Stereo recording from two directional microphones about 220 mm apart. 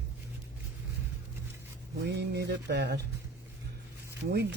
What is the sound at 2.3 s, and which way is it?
Speech, 50° right (ahead or behind).